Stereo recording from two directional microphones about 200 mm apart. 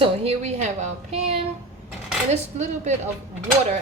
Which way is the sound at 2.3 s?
35° right (ahead or behind).